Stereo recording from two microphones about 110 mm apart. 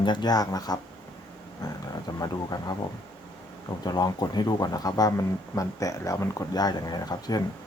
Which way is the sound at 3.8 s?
35° left (ahead or behind).